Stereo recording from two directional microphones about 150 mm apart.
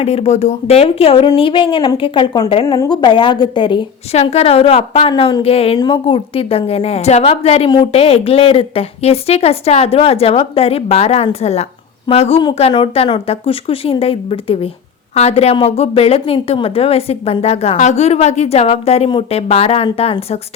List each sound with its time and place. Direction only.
0.0 s a woman's voice: 45° left (ahead or behind)
4.1 s a woman's voice: 45° left (ahead or behind)